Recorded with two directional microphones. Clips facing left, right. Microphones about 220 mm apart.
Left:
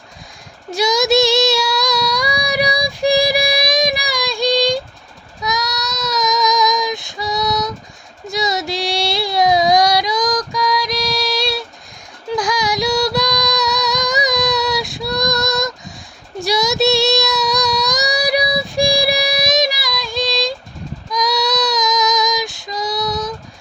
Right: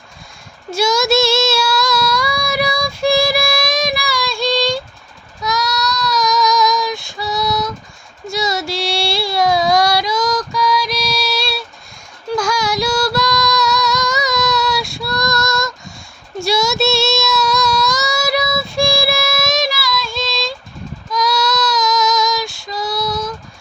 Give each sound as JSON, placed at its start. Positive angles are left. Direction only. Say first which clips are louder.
{"t": 0.7, "sound": "child singing", "louder": "even", "side_deg": 15}
{"t": 12.4, "sound": "female singing", "louder": "even", "side_deg": 15}
{"t": 16.4, "sound": "child singing", "louder": "even", "side_deg": 15}